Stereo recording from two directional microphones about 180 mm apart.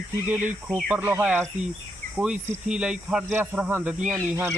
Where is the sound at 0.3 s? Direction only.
10° right (ahead or behind).